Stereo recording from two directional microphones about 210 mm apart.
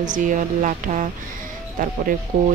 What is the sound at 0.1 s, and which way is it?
Speech, 40° right (ahead or behind).